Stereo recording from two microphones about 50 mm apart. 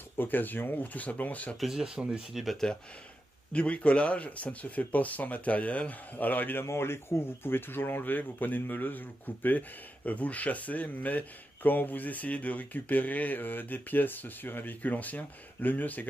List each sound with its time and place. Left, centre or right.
0.2 s speech: left
1.6 s speech: centre
2.5 s speech: centre
3.5 s speech: left
6.6 s speech: left